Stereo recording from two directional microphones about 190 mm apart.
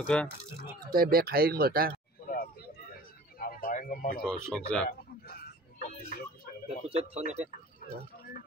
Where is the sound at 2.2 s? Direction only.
50° left (ahead or behind).